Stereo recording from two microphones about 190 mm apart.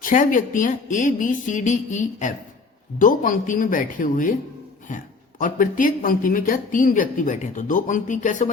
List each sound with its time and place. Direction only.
0.0 s a woman's voice: 45° left (ahead or behind)
5.4 s speech: 45° left (ahead or behind)